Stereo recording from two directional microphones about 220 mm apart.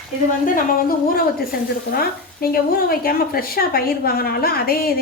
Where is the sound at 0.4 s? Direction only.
40° left (ahead or behind).